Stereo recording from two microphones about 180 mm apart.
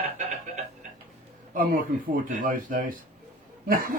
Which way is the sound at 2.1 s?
50° right (ahead or behind).